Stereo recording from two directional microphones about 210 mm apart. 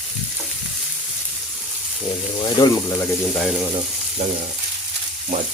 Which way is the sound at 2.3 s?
20° left (ahead or behind).